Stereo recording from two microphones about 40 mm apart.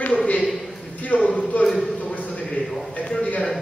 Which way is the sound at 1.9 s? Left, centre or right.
Left.